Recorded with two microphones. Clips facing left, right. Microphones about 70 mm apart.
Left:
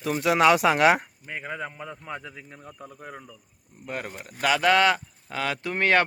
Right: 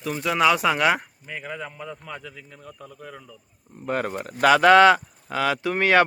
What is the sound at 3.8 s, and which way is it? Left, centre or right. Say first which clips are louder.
Speech: right 8 dB; right.